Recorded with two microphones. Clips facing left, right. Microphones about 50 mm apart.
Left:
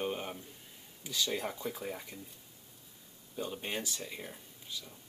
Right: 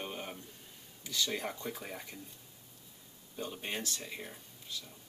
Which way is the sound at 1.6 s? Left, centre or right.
Centre.